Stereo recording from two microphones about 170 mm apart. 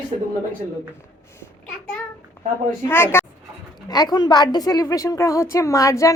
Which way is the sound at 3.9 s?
25° left (ahead or behind).